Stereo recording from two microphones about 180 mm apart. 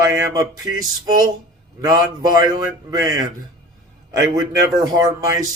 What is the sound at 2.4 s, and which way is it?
Speech, 20° right (ahead or behind).